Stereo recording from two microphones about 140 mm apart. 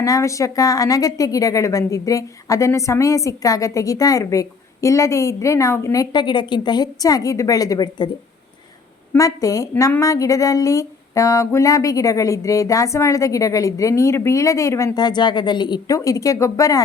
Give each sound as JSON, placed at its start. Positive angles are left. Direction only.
{"t": 0.0, "sound": "a woman's voice", "side_deg": 25}
{"t": 9.1, "sound": "a woman's voice", "side_deg": 25}